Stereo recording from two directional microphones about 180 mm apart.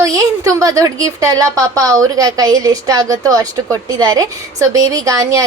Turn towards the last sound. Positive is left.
turn(degrees=-20)  # may be behind; listen again after turning